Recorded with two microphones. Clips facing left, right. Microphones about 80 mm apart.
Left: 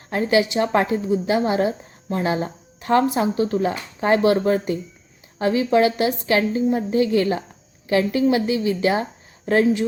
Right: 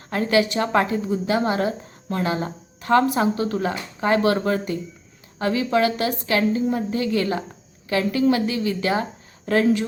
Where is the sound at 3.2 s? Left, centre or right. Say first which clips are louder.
Left 1 dB; right.